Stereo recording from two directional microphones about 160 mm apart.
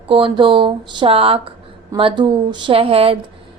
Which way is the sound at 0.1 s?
30° right (ahead or behind).